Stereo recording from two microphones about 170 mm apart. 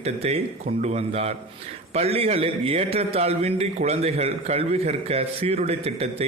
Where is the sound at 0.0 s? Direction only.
40° right (ahead or behind).